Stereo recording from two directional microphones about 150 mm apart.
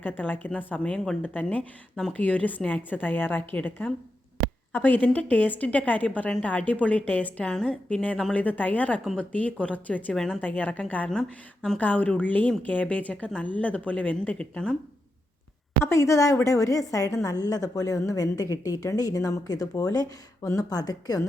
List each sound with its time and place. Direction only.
0.0 s speech: 10° left (ahead or behind)
15.8 s speech: 20° left (ahead or behind)